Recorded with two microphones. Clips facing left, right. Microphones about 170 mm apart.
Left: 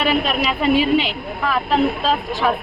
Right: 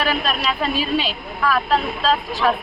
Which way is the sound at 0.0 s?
15° left (ahead or behind).